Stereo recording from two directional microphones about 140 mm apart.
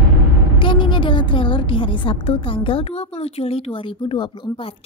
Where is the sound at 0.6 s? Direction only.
35° left (ahead or behind).